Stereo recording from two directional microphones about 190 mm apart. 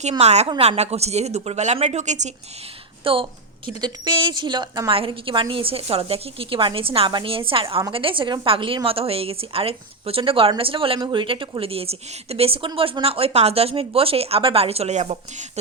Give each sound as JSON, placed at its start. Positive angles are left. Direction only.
{"t": 0.2, "sound": "a woman's voice", "side_deg": -35}
{"t": 3.0, "sound": "a woman's voice", "side_deg": -25}